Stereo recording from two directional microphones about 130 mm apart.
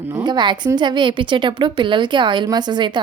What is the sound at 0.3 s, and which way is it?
A woman's voice, 35° right (ahead or behind).